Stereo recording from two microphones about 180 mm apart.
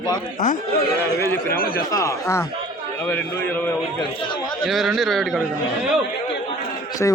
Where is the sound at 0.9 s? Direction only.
10° left (ahead or behind).